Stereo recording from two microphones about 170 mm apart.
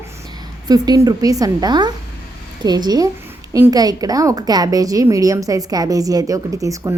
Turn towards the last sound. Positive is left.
turn(degrees=-20)  # may be behind; listen again after turning